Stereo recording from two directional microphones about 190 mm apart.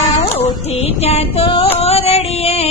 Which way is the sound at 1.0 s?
30° left (ahead or behind).